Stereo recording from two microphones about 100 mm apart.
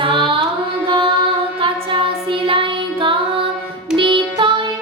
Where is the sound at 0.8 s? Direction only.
60° right (ahead or behind).